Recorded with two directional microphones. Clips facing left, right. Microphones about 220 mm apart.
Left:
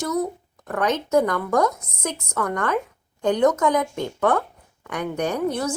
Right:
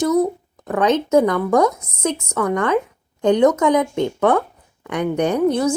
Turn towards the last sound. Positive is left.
turn(degrees=-20)  # may be behind; listen again after turning